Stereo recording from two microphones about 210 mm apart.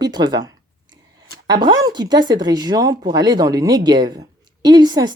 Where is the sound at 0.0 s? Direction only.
20° right (ahead or behind).